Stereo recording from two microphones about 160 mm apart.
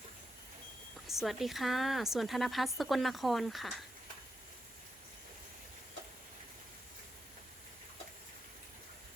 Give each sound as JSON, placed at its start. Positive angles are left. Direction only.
{"t": 1.0, "sound": "speech", "side_deg": 0}